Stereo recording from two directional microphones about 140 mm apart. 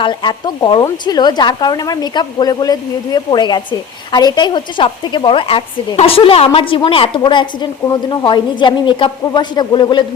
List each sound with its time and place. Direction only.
0.0 s speech: 35° left (ahead or behind)